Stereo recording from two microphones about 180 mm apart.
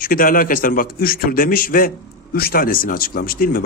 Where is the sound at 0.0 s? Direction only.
50° left (ahead or behind).